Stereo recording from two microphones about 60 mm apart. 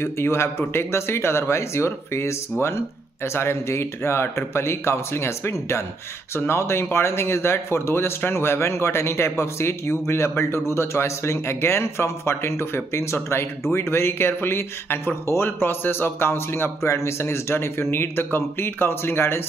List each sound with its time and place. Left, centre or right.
0.0 s speech: left